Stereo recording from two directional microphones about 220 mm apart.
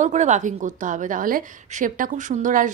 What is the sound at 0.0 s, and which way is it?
A woman's voice, 30° right (ahead or behind).